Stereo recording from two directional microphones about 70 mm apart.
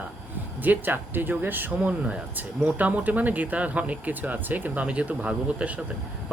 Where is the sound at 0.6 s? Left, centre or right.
Right.